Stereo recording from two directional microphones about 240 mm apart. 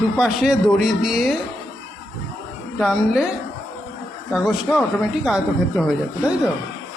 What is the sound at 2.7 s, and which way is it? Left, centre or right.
Speech, centre.